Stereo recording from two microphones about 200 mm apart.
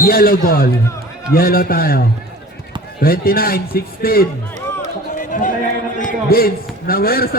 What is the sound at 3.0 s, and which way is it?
A man's voice, 50° left (ahead or behind).